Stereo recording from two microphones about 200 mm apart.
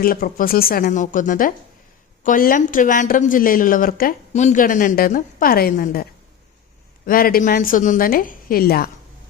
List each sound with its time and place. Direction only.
0.0 s a woman's voice: 45° left (ahead or behind)